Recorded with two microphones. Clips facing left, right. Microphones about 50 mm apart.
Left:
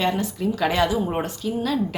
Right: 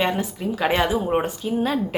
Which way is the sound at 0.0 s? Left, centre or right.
Centre.